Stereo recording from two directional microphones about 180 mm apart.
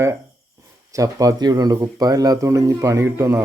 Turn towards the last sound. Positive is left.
turn(degrees=-15)  # may be behind; listen again after turning